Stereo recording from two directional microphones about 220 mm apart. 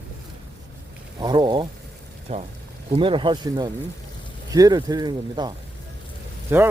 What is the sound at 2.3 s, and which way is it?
Speech, 30° right (ahead or behind).